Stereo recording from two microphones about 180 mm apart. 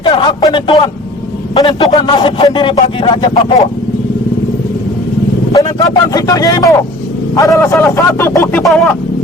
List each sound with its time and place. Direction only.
0.0 s speech: 25° left (ahead or behind)
5.5 s speech: 20° left (ahead or behind)
8.6 s a sound: centre (ahead or behind)